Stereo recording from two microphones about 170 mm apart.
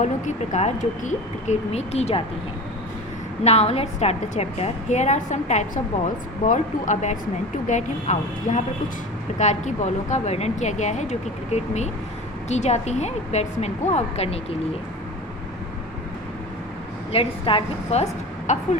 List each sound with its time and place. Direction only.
0.0 s a woman's voice: 45° left (ahead or behind)
3.4 s a woman's voice: 40° left (ahead or behind)
17.1 s a woman's voice: 35° left (ahead or behind)